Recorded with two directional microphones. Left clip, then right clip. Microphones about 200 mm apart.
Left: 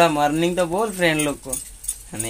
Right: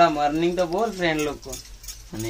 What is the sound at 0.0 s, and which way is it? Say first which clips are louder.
Speech: left 2 dB; 45° left (ahead or behind).